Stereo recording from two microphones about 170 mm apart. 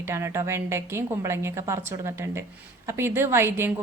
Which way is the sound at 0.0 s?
15° right (ahead or behind).